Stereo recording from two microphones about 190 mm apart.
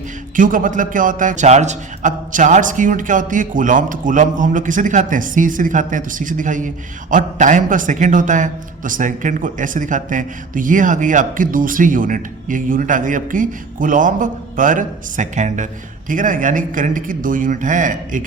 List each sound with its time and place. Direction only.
0.3 s a man's voice: 45° right (ahead or behind)